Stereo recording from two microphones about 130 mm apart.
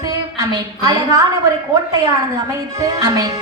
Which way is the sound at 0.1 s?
30° right (ahead or behind).